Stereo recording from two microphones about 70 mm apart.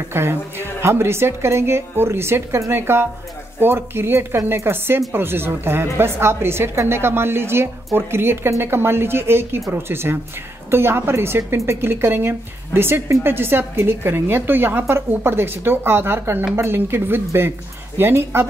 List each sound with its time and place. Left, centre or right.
0.1 s a woman's voice: right